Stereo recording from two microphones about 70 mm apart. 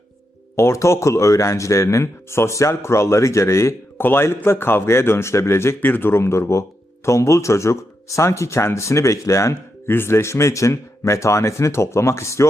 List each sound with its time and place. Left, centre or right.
0.5 s speech: left
9.9 s speech: left